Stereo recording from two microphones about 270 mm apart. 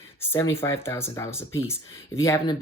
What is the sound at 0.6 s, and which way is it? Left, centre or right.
Speech, centre.